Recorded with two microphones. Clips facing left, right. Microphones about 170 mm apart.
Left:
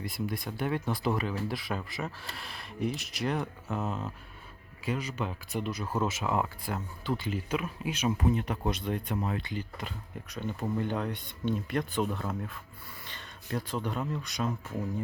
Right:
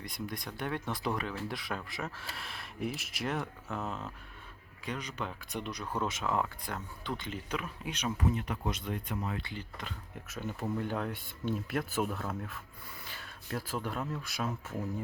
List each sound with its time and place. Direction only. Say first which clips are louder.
0.0 s speech: left 5 dB; 5° left (ahead or behind)
8.2 s speech: left 4 dB; 30° left (ahead or behind)
9.4 s speech: left 5 dB; 15° left (ahead or behind)
10.2 s speech: left 2 dB; 5° right (ahead or behind)
13.1 s a sound: left 3 dB; 5° right (ahead or behind)
14.1 s speech: left 3 dB; 5° right (ahead or behind)